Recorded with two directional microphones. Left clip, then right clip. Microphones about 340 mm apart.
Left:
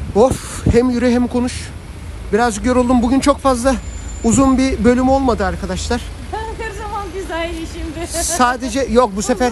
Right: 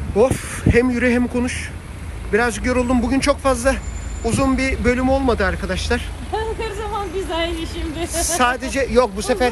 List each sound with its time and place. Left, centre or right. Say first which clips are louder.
0.5 s speech: left 2 dB; centre
6.3 s a sound: right 1 dB; left
8.0 s speech: left 3 dB; left